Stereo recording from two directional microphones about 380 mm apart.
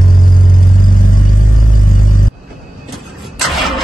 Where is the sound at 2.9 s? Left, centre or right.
Centre.